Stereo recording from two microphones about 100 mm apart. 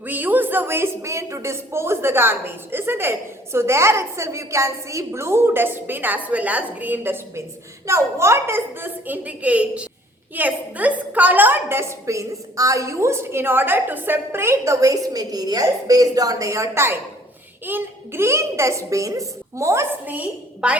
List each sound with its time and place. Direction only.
0.0 s a woman's voice: 20° right (ahead or behind)